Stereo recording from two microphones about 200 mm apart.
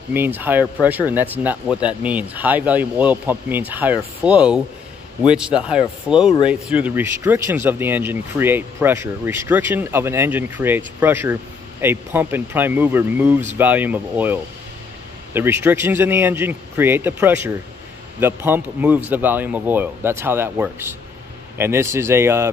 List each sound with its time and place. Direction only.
0.1 s speech: 10° right (ahead or behind)